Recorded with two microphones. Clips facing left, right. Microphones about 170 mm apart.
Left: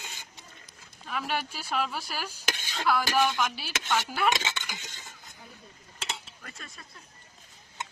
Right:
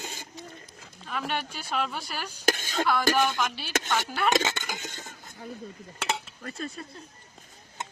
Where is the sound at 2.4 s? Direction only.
45° right (ahead or behind).